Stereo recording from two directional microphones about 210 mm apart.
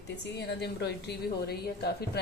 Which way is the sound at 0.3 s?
55° left (ahead or behind).